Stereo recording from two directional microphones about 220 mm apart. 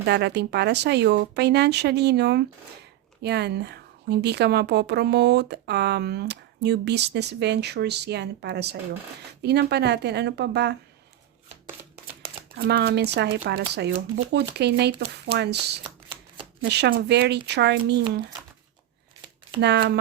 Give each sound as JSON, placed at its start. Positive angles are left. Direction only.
{"t": 0.0, "sound": "a woman's voice", "side_deg": -50}
{"t": 12.5, "sound": "a woman's voice", "side_deg": -45}
{"t": 19.6, "sound": "a woman's voice", "side_deg": -50}